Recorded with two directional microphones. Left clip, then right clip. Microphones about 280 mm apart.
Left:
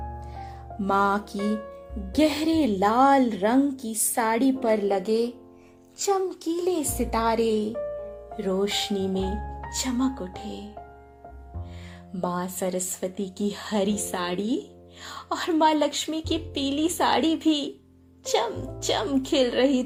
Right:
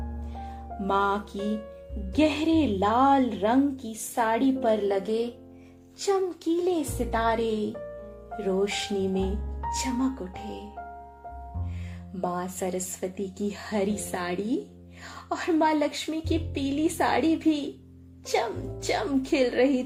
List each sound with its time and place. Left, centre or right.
0.9 s a woman's voice: left
12.2 s a woman's voice: centre